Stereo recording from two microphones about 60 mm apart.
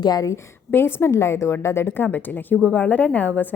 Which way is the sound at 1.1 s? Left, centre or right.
Left.